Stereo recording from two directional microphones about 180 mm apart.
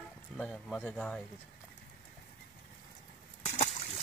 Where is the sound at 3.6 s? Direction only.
35° left (ahead or behind).